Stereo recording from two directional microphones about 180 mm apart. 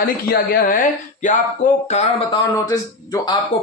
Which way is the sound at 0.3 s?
50° left (ahead or behind).